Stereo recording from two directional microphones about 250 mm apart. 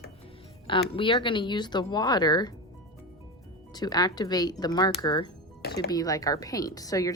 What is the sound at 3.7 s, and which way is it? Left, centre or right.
Speech, centre.